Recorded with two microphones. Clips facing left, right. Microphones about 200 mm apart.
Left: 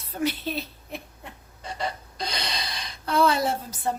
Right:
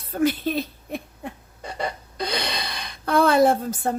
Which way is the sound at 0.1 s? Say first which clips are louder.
Right 6 dB; 50° right (ahead or behind).